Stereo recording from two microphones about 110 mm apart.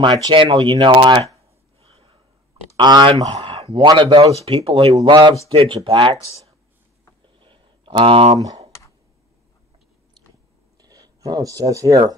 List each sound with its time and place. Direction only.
0.0 s speech: 40° right (ahead or behind)
1.8 s snort: 60° right (ahead or behind)
2.8 s speech: 45° right (ahead or behind)
4.2 s speech: 70° right (ahead or behind)
5.0 s speech: 45° right (ahead or behind)
7.3 s a sound: 50° right (ahead or behind)
10.8 s speech: 35° right (ahead or behind)